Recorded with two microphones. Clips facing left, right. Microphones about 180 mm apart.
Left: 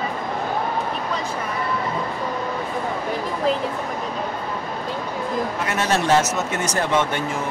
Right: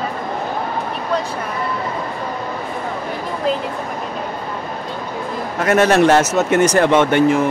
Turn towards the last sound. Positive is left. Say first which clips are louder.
# right 9 dB
turn(degrees=-75)  # may be behind; listen again after turning